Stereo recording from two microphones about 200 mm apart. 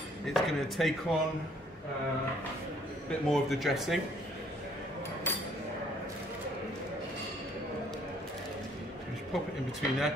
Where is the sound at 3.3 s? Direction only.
Centre (ahead or behind).